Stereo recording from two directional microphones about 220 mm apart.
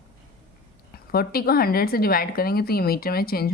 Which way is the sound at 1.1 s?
45° left (ahead or behind).